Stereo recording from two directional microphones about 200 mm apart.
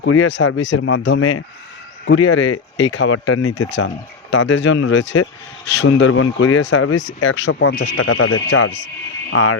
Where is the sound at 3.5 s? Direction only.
65° left (ahead or behind).